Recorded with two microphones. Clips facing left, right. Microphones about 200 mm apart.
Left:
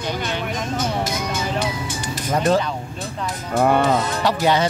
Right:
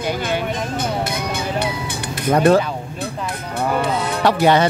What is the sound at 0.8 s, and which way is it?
Music, 60° right (ahead or behind).